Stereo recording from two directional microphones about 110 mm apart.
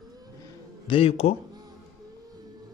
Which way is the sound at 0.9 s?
60° left (ahead or behind).